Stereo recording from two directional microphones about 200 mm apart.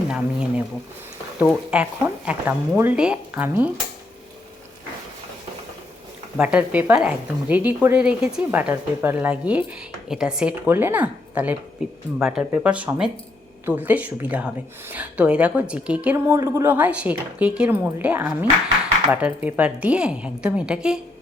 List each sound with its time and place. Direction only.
0.1 s speech: 5° right (ahead or behind)
6.3 s speech: 5° right (ahead or behind)